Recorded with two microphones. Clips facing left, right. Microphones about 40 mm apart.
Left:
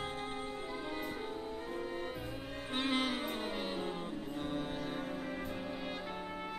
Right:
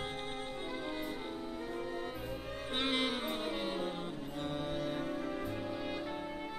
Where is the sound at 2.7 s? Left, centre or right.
Right.